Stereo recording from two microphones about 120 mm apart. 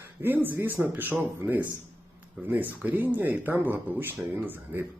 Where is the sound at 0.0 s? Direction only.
15° right (ahead or behind).